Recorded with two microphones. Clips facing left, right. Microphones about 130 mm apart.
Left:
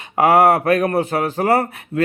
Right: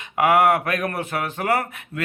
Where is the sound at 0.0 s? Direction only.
35° left (ahead or behind).